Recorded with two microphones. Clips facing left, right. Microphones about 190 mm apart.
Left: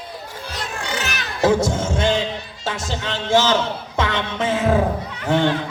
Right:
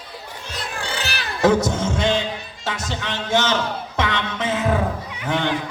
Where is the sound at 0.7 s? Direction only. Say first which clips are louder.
Left 1 dB; 35° right (ahead or behind).